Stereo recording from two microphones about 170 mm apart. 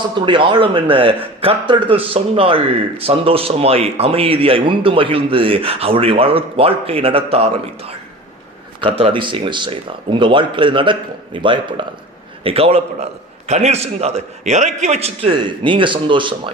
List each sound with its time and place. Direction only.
0.3 s speech: 30° right (ahead or behind)